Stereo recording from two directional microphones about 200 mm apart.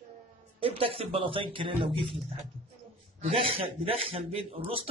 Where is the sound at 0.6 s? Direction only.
30° right (ahead or behind).